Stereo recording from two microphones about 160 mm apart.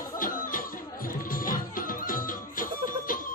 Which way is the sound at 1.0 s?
60° left (ahead or behind).